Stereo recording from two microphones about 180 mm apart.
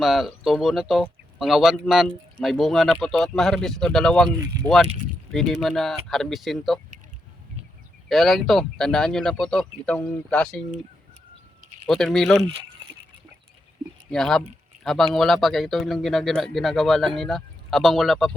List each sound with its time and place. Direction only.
0.0 s speech: 5° right (ahead or behind)
4.5 s speech: 20° right (ahead or behind)
5.3 s speech: centre (ahead or behind)
8.1 s speech: centre (ahead or behind)
11.9 s speech: centre (ahead or behind)
14.1 s speech: centre (ahead or behind)